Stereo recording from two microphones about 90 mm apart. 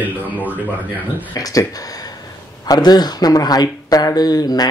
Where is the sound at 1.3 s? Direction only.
45° left (ahead or behind).